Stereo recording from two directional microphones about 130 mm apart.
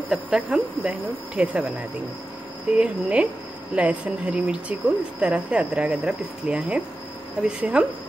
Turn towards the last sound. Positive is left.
turn(degrees=-10)  # may be behind; listen again after turning